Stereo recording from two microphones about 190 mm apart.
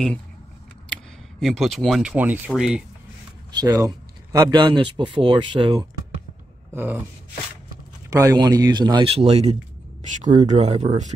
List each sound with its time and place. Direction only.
1.4 s speech: centre (ahead or behind)
3.5 s speech: 20° right (ahead or behind)
6.7 s speech: 10° right (ahead or behind)
8.1 s a man's voice: 20° right (ahead or behind); by 11.1 s 40° right (ahead or behind)